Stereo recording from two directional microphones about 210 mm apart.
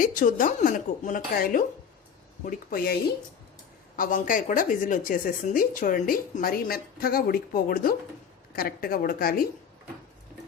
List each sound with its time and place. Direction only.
0.0 s a woman's voice: 40° left (ahead or behind)